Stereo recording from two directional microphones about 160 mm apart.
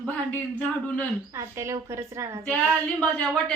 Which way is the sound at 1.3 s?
20° right (ahead or behind).